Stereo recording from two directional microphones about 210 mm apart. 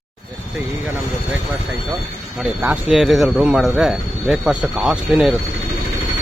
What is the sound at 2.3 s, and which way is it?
Speech, 5° right (ahead or behind).